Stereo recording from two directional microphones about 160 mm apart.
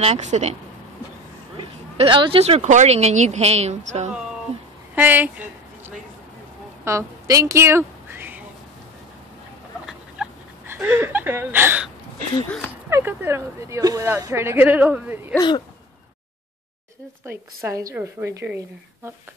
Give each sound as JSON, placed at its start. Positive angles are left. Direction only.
{"t": 0.0, "sound": "speech", "side_deg": -45}
{"t": 1.6, "sound": "speech", "side_deg": -30}
{"t": 4.9, "sound": "a sound", "side_deg": -10}
{"t": 10.2, "sound": "dog", "side_deg": -5}
{"t": 10.7, "sound": "speech", "side_deg": -15}
{"t": 12.9, "sound": "speech", "side_deg": -15}
{"t": 15.3, "sound": "speech", "side_deg": 25}
{"t": 17.3, "sound": "speech", "side_deg": -20}